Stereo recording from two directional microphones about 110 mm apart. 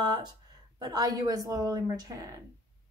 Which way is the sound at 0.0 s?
40° right (ahead or behind).